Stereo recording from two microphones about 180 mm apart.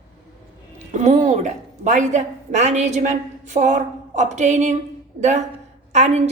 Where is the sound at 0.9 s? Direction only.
40° right (ahead or behind).